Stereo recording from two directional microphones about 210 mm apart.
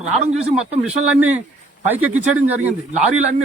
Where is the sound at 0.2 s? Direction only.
30° right (ahead or behind).